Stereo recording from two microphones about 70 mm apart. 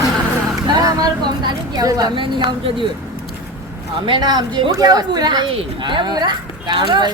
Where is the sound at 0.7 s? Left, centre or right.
Right.